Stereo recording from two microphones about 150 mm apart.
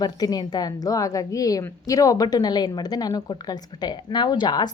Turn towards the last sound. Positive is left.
turn(degrees=30)  # may be behind; listen again after turning